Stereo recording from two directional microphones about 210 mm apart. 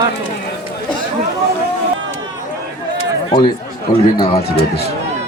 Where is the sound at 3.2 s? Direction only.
25° left (ahead or behind).